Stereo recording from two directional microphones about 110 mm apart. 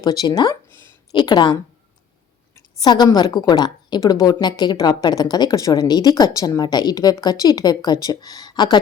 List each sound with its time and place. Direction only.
0.0 s a woman's voice: 35° left (ahead or behind)
2.8 s a woman's voice: 40° left (ahead or behind)